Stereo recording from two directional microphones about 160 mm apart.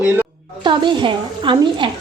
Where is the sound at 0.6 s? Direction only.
30° right (ahead or behind).